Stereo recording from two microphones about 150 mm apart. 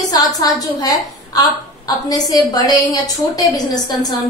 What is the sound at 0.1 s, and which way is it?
A woman's voice, 25° left (ahead or behind).